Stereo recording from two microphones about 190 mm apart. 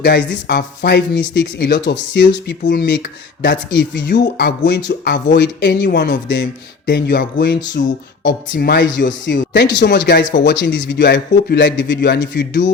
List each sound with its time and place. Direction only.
0.0 s speech: 60° left (ahead or behind)